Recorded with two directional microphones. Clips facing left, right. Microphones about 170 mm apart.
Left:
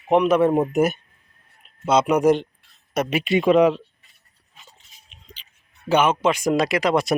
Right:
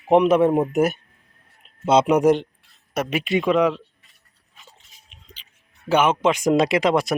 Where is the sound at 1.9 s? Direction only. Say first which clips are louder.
Right 1 dB; 25° right (ahead or behind).